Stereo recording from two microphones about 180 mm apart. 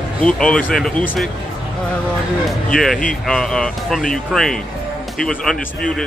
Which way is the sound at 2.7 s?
5° left (ahead or behind).